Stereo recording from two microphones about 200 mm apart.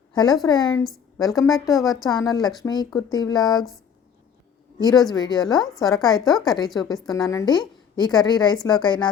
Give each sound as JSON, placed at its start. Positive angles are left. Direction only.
{"t": 0.1, "sound": "a woman's voice", "side_deg": 20}
{"t": 1.5, "sound": "speech", "side_deg": 0}
{"t": 2.0, "sound": "a woman's voice", "side_deg": 20}
{"t": 4.8, "sound": "speech", "side_deg": 20}
{"t": 6.1, "sound": "speech", "side_deg": 0}
{"t": 6.4, "sound": "a woman's voice", "side_deg": 20}